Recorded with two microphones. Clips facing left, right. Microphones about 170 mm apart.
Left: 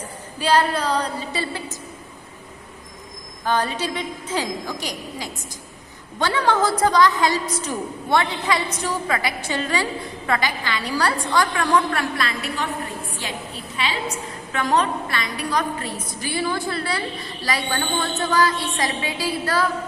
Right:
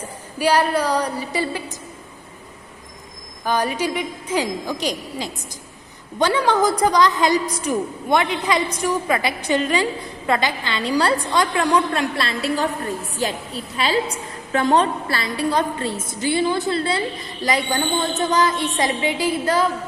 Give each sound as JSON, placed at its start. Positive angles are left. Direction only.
{"t": 0.3, "sound": "a woman's voice", "side_deg": -10}
{"t": 3.4, "sound": "a woman's voice", "side_deg": -10}
{"t": 12.2, "sound": "a woman's voice", "side_deg": -30}
{"t": 13.2, "sound": "a woman's voice", "side_deg": -40}